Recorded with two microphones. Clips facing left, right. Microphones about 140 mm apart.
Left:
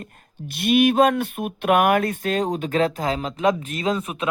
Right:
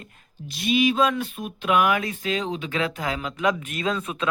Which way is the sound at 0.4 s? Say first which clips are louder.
Left 4 dB; 60° left (ahead or behind).